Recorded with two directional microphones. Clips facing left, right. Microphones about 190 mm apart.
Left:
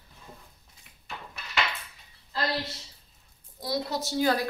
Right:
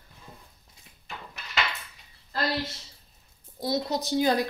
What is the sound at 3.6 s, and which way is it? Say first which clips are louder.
Speech: right 3 dB; 20° right (ahead or behind).